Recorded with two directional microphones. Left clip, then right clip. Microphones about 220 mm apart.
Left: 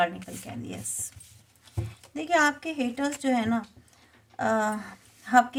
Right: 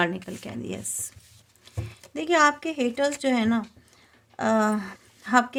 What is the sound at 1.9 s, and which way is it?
Speech, 40° right (ahead or behind).